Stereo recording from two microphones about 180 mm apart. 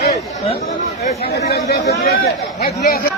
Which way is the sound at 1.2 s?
65° left (ahead or behind).